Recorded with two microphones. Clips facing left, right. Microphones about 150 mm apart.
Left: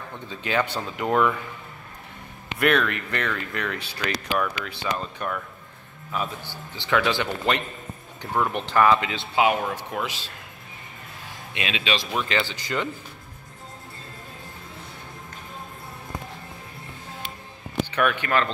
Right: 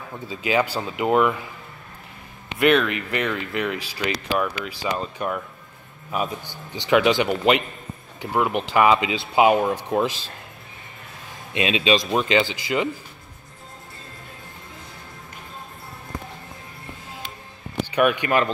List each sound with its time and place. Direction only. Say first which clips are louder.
0.1 s speech: right 4 dB; 10° right (ahead or behind)
2.6 s speech: right 4 dB; 5° right (ahead or behind); by 10.1 s 25° right (ahead or behind)
11.5 s speech: right 7 dB; 25° right (ahead or behind)
12.3 s speech: right 6 dB; 10° right (ahead or behind)
17.9 s speech: right 4 dB; 15° right (ahead or behind)